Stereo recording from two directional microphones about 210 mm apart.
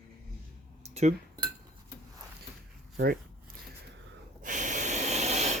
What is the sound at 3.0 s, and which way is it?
Zipper, 45° right (ahead or behind).